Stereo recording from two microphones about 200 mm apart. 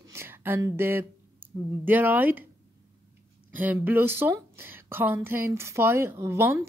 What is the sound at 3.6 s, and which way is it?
A woman's voice, 10° right (ahead or behind).